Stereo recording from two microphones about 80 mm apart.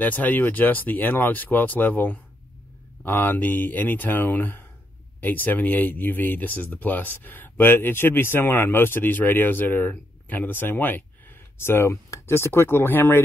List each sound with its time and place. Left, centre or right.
0.0 s speech: left